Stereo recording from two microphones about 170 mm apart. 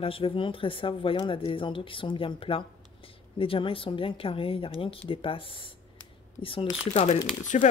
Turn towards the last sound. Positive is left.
turn(degrees=45)  # may be behind; listen again after turning